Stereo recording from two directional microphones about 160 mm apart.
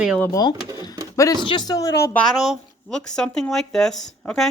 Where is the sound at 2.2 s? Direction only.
Centre (ahead or behind).